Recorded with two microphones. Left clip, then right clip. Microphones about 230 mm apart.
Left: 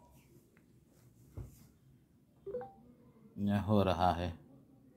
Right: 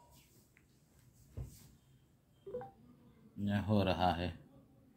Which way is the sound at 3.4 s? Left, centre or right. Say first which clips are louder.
Left 3 dB; left.